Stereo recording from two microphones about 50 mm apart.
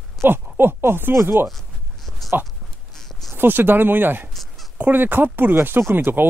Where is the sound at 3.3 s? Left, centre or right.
Right.